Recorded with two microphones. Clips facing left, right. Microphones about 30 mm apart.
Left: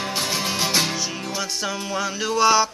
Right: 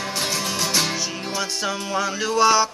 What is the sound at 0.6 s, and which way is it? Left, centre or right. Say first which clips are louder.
Music: left 1 dB; centre.